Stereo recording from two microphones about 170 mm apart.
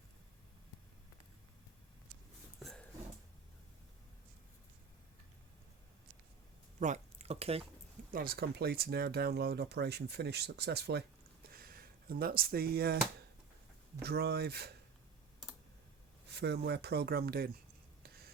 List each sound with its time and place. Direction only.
2.6 s a sound: centre (ahead or behind)
6.7 s speech: 45° right (ahead or behind)
8.1 s speech: 60° right (ahead or behind)
11.5 s speech: 60° right (ahead or behind)
14.0 s speech: 70° right (ahead or behind)
16.2 s speech: 80° right
18.0 s a sound: 65° right (ahead or behind)